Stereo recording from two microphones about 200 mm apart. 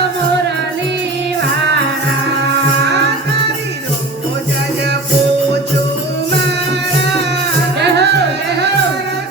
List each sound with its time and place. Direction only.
7.8 s music: 60° right (ahead or behind)